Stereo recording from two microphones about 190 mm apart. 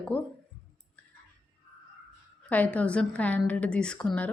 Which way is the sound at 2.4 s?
5° left (ahead or behind).